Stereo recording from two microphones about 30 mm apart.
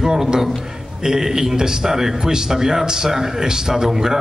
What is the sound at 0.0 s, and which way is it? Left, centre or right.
A man's voice, centre.